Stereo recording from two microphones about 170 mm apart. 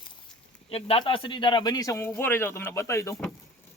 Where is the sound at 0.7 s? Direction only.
35° left (ahead or behind).